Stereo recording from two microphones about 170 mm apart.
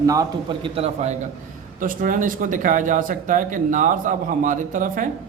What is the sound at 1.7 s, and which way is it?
Speech, 55° right (ahead or behind).